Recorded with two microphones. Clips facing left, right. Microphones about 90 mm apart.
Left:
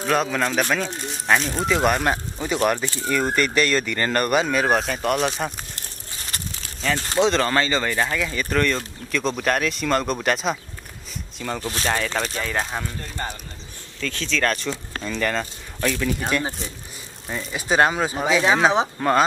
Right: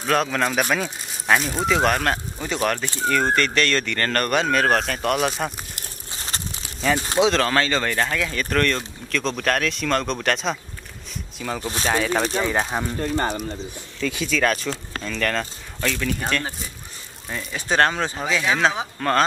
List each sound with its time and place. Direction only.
0.0 s speech: centre (ahead or behind)
6.1 s crumpling: 25° right (ahead or behind)
6.8 s speech: 10° right (ahead or behind)
11.6 s speech: 15° right (ahead or behind)
11.9 s speech: 5° right (ahead or behind)
12.2 s speech: 20° right (ahead or behind)
13.0 s speech: 55° right (ahead or behind)
14.0 s speech: 10° right (ahead or behind)
14.7 s speech: 10° left (ahead or behind)